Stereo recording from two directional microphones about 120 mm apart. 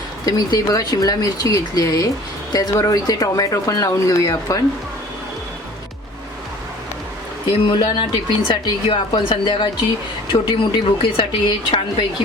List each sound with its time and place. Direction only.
0.3 s speech: 30° left (ahead or behind)
7.6 s speech: 40° left (ahead or behind)